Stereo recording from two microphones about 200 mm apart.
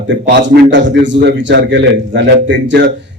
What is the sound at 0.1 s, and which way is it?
A man's voice, 60° right (ahead or behind).